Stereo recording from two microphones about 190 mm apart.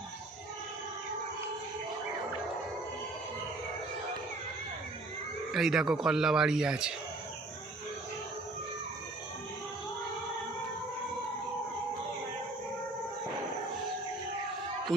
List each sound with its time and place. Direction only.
5.5 s speech: centre (ahead or behind)